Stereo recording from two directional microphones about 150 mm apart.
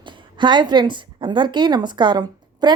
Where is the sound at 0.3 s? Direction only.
30° right (ahead or behind).